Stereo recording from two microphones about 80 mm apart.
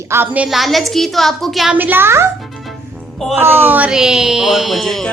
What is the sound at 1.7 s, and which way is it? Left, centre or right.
Speech, right.